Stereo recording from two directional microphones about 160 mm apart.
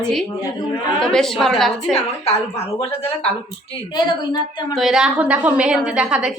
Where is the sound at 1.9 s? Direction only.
40° left (ahead or behind).